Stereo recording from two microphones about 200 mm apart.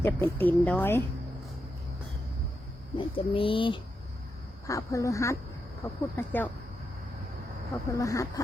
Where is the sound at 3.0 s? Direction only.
25° left (ahead or behind); by 6.5 s 10° left (ahead or behind).